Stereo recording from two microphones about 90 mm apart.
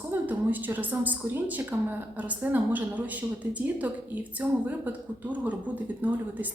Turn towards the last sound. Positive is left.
turn(degrees=-20)  # may be behind; listen again after turning